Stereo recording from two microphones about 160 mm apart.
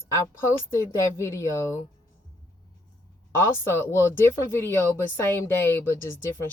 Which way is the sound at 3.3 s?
15° left (ahead or behind).